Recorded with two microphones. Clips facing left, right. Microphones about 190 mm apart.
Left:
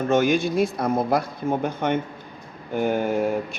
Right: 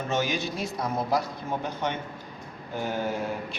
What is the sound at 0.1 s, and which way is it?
Speech, 55° left (ahead or behind).